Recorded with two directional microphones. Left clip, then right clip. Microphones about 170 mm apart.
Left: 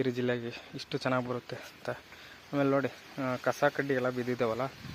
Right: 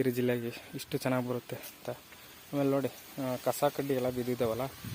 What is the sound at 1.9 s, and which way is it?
Speech, 15° right (ahead or behind).